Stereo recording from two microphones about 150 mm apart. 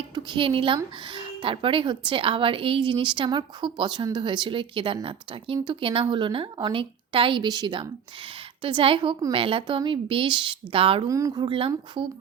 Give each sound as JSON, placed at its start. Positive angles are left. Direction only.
{"t": 0.1, "sound": "a woman's voice", "side_deg": -30}
{"t": 11.1, "sound": "speech", "side_deg": -20}
{"t": 11.4, "sound": "a woman's voice", "side_deg": -35}